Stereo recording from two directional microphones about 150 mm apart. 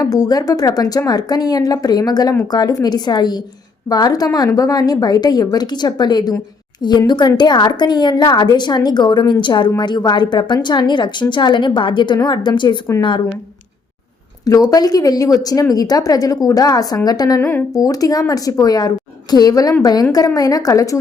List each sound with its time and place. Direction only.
0.0 s a woman's voice: 25° left (ahead or behind)
14.4 s a woman's voice: 25° left (ahead or behind)